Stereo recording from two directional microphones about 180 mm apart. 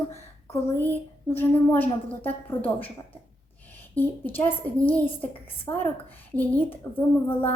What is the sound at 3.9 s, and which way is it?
A woman's voice, 10° left (ahead or behind).